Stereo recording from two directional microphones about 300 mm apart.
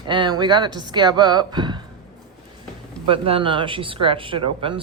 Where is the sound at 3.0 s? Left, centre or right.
Centre.